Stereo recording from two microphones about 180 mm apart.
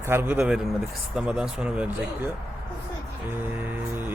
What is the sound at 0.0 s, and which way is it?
Speech, 10° right (ahead or behind).